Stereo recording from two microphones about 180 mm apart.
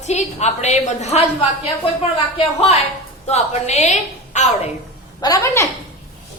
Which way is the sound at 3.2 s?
35° left (ahead or behind).